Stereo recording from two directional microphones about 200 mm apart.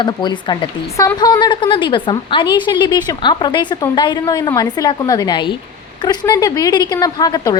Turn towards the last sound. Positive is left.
turn(degrees=20)  # may be behind; listen again after turning